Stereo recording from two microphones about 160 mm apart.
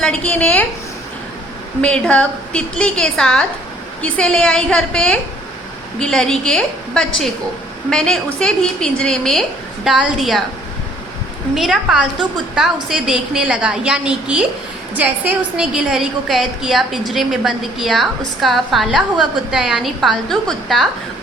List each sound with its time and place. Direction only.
0.0 s a woman's voice: 5° left (ahead or behind)
1.8 s a woman's voice: 5° left (ahead or behind)
11.5 s a woman's voice: centre (ahead or behind)